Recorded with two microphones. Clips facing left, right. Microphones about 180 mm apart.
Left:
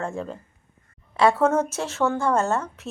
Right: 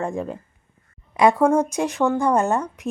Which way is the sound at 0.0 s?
15° right (ahead or behind).